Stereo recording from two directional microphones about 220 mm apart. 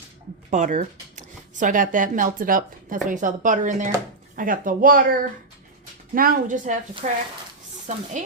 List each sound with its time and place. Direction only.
0.5 s speech: 35° right (ahead or behind)
6.1 s speech: 40° right (ahead or behind)